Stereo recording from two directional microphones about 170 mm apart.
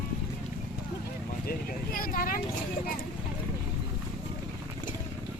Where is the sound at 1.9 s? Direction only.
55° left (ahead or behind).